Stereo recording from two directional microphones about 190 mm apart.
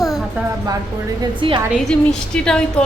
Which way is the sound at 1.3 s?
25° right (ahead or behind).